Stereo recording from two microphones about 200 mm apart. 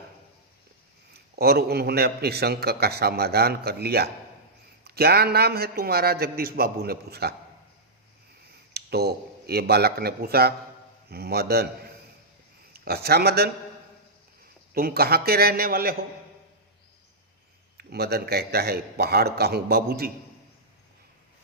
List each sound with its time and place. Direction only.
1.1 s a man's voice: 50° right (ahead or behind)
8.7 s a man's voice: 55° right (ahead or behind)
12.7 s speech: 50° right (ahead or behind)
14.7 s a man's voice: 50° right (ahead or behind)
17.7 s a man's voice: 55° right (ahead or behind)